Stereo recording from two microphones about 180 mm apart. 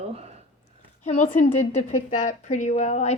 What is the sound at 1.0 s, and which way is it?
A woman's voice, 40° left (ahead or behind).